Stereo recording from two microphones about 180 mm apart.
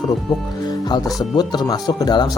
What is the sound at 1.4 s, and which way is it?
Speech, 25° left (ahead or behind).